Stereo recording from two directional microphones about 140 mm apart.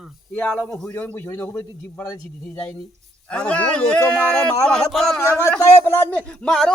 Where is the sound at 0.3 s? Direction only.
10° left (ahead or behind).